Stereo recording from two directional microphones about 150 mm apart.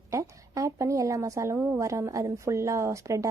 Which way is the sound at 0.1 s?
20° right (ahead or behind).